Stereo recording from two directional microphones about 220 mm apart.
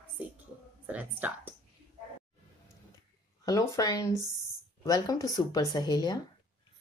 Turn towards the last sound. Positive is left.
turn(degrees=20)  # may be behind; listen again after turning